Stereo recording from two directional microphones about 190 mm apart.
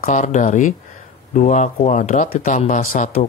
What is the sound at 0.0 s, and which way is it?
Speech, 40° left (ahead or behind).